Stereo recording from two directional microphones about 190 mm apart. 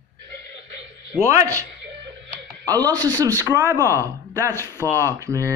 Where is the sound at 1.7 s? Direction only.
65° right (ahead or behind).